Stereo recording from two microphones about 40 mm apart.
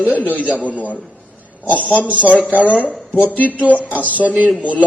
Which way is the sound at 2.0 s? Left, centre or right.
Left.